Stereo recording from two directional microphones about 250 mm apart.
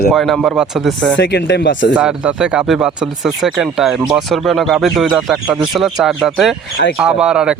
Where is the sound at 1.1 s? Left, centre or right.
Left.